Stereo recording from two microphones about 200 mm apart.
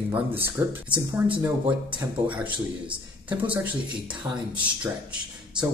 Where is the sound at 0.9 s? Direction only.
25° right (ahead or behind).